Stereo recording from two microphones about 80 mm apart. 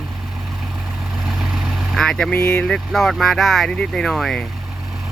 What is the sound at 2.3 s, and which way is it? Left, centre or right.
Speech, left.